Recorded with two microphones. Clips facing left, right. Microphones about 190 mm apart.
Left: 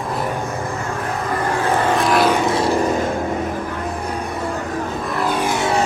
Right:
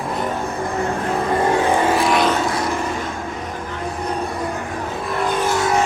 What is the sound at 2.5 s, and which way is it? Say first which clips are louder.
Music: left 4 dB; 25° left (ahead or behind).